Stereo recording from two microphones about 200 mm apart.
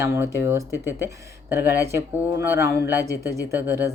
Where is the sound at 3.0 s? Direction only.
15° left (ahead or behind).